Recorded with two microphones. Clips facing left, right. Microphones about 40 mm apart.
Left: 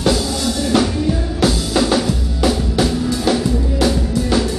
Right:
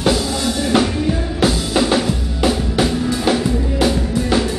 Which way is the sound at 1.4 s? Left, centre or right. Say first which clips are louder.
Even; right.